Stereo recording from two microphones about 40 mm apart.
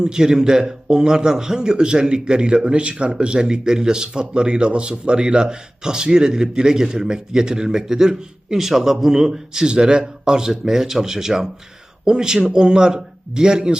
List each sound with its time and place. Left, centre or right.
0.0 s a man's voice: centre